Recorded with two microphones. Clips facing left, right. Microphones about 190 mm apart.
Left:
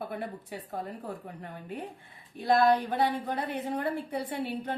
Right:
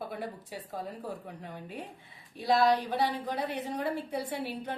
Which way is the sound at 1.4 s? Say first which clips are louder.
Left 2 dB; 55° left (ahead or behind).